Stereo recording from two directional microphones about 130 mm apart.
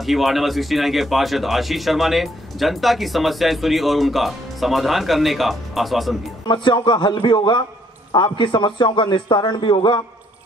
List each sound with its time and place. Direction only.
0.0 s speech: centre (ahead or behind)
6.4 s a man's voice: 35° left (ahead or behind)